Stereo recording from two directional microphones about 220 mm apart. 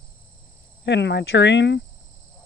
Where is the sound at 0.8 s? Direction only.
50° left (ahead or behind).